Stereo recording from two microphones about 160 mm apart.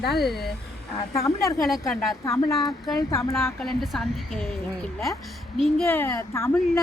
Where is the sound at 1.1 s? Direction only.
20° left (ahead or behind).